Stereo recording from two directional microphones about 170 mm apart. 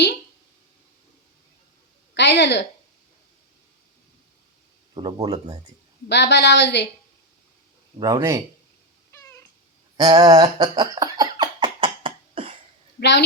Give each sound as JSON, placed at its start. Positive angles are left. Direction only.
{"t": 2.1, "sound": "a woman's voice", "side_deg": 90}
{"t": 4.9, "sound": "speech", "side_deg": -25}
{"t": 6.1, "sound": "a woman's voice", "side_deg": 85}
{"t": 7.9, "sound": "speech", "side_deg": -20}
{"t": 10.0, "sound": "a sound", "side_deg": -25}
{"t": 13.0, "sound": "a woman's voice", "side_deg": 90}